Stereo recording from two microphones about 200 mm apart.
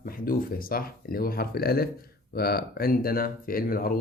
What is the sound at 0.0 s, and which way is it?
Speech, 45° left (ahead or behind).